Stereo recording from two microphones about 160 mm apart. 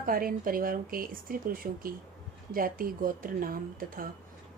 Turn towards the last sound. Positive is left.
turn(degrees=-60)  # may be behind; listen again after turning